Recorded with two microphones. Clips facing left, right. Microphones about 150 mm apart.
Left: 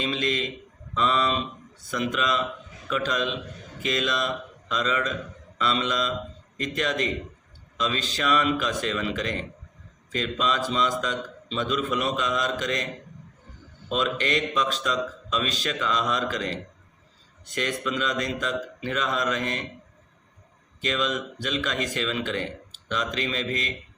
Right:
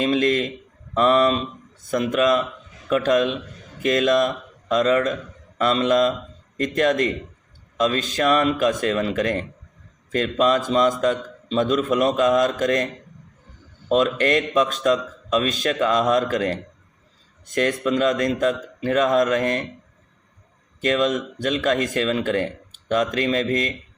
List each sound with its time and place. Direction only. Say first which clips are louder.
0.0 s speech: right 8 dB; 50° right (ahead or behind)
20.8 s speech: right 7 dB; 50° right (ahead or behind)